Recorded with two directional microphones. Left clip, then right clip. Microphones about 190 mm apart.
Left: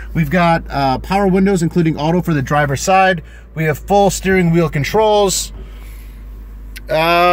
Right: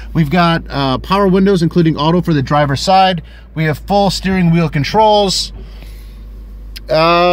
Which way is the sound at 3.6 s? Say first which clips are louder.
Left 1 dB; centre (ahead or behind).